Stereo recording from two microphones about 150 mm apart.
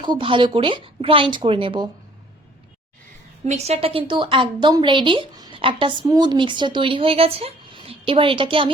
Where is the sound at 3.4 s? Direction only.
45° right (ahead or behind).